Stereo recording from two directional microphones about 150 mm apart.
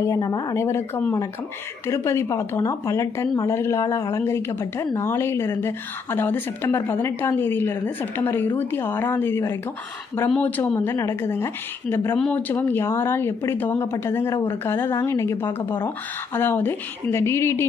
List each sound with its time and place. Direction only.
0.0 s a woman's voice: 25° left (ahead or behind)